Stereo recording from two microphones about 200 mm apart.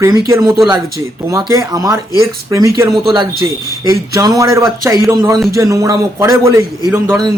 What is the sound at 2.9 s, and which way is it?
Speech, centre (ahead or behind).